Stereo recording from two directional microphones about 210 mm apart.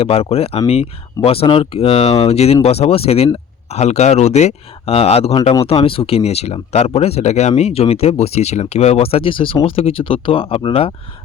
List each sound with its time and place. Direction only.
0.0 s speech: 30° left (ahead or behind)